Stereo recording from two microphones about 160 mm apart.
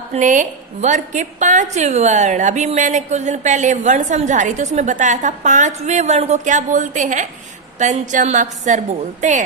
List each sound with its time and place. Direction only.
0.1 s a woman's voice: 50° right (ahead or behind)